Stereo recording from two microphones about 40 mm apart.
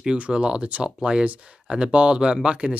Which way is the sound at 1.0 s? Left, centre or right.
Right.